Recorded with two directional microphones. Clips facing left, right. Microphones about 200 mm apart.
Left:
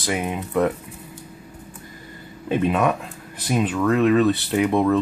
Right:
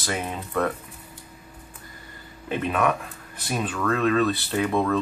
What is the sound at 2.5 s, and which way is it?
Speech, 20° left (ahead or behind).